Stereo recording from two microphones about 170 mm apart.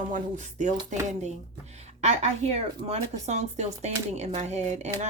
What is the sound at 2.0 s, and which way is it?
Speech, 40° right (ahead or behind).